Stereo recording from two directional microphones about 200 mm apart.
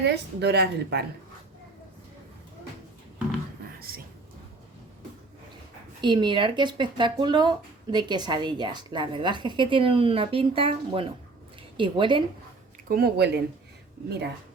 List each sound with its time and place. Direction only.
0.0 s a woman's voice: 55° right (ahead or behind)
3.8 s a sound: 50° right (ahead or behind)
6.0 s speech: 20° right (ahead or behind)
12.9 s speech: 50° right (ahead or behind)